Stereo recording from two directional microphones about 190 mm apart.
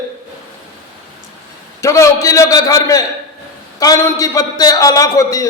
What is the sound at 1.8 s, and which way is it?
A man's voice, 15° left (ahead or behind).